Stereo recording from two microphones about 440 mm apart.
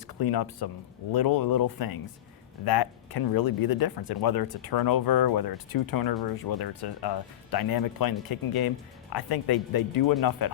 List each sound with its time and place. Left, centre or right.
0.1 s speech: left